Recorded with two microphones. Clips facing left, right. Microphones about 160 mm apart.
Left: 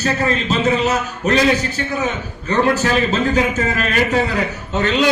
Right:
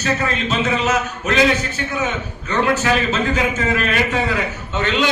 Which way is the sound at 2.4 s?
35° left (ahead or behind).